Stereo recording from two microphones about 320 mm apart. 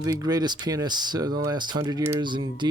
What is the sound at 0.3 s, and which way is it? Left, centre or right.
Speech, centre.